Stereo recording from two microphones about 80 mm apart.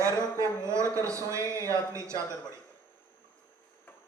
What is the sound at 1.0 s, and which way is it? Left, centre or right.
A man's voice, right.